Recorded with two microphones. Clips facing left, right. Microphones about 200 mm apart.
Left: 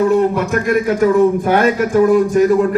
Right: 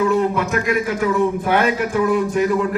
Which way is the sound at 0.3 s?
45° left (ahead or behind).